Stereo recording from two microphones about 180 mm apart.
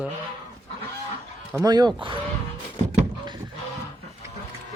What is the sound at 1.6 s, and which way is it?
Speech, 20° right (ahead or behind).